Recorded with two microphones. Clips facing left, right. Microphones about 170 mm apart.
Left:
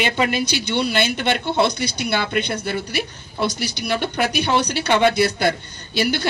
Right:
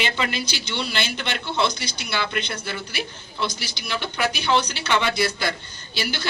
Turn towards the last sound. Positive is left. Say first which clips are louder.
# left 8 dB
turn(degrees=50)  # may be behind; listen again after turning